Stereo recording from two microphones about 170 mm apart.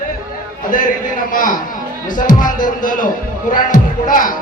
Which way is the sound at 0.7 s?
50° left (ahead or behind).